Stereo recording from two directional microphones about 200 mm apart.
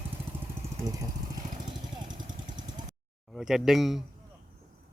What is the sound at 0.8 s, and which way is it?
Vehicle, 15° right (ahead or behind).